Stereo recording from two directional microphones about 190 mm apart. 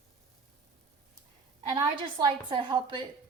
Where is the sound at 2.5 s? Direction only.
25° right (ahead or behind).